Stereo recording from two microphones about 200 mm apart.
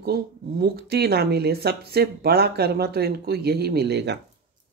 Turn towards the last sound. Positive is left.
turn(degrees=-55)  # may be behind; listen again after turning